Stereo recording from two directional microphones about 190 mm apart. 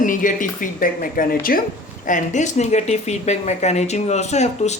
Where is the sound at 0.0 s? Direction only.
45° left (ahead or behind).